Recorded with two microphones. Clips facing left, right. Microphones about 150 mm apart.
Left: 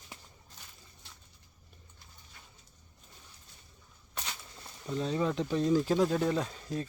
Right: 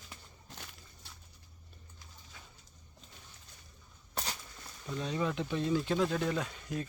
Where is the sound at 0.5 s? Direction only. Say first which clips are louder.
Right 8 dB; 75° right (ahead or behind).